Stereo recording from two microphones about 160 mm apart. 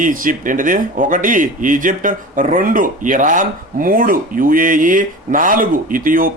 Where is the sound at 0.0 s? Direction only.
60° right (ahead or behind).